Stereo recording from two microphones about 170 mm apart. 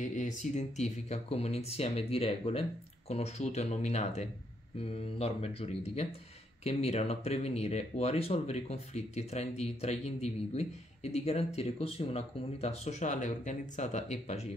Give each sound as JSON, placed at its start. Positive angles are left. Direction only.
{"t": 0.0, "sound": "speech", "side_deg": 45}